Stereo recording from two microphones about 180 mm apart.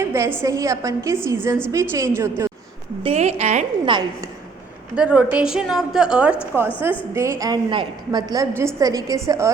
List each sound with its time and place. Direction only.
0.0 s a sound: 15° right (ahead or behind)
0.4 s a woman's voice: 15° right (ahead or behind)
3.0 s a woman's voice: 35° right (ahead or behind)
3.8 s a woman's voice: 25° right (ahead or behind)
4.9 s a woman's voice: 5° right (ahead or behind)
7.1 s a woman's voice: 15° right (ahead or behind)